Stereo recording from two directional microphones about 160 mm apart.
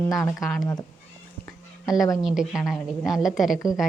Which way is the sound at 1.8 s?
Centre (ahead or behind).